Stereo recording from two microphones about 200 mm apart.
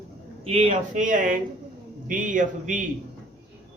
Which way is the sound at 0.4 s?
30° right (ahead or behind).